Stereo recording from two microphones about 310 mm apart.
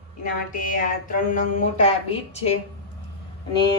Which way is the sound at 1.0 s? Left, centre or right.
Left.